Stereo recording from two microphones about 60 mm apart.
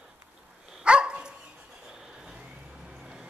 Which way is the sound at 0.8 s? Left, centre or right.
Centre.